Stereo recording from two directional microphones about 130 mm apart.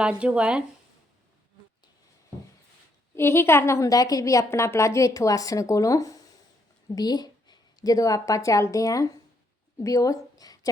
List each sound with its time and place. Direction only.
0.0 s speech: 10° right (ahead or behind)
3.2 s a woman's voice: 20° left (ahead or behind)